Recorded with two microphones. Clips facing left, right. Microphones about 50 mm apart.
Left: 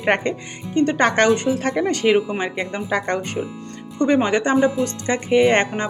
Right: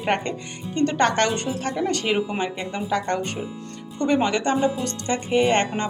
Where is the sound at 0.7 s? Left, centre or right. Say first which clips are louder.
Left 3 dB; centre.